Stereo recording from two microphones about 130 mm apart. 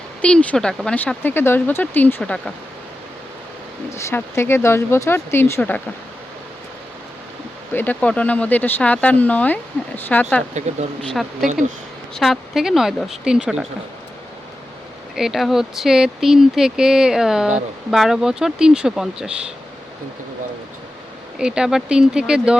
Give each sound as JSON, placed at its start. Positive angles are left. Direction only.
{"t": 0.2, "sound": "speech", "side_deg": 5}
{"t": 0.9, "sound": "speech", "side_deg": 15}
{"t": 3.8, "sound": "speech", "side_deg": 20}
{"t": 7.7, "sound": "speech", "side_deg": 15}
{"t": 11.1, "sound": "speech", "side_deg": 0}
{"t": 15.1, "sound": "speech", "side_deg": -5}
{"t": 21.3, "sound": "speech", "side_deg": -5}